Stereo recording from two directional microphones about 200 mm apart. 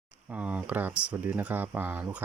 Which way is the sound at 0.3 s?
5° right (ahead or behind).